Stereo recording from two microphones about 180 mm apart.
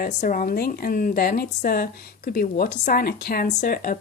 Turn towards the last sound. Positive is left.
turn(degrees=50)  # may be behind; listen again after turning